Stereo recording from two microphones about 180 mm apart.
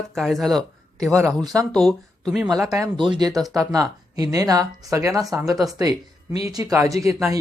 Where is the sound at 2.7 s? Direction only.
25° right (ahead or behind).